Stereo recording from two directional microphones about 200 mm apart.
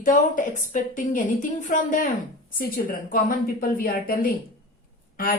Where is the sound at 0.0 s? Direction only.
40° left (ahead or behind).